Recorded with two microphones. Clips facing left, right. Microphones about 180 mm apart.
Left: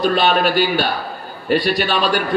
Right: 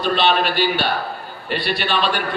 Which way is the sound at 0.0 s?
45° left (ahead or behind).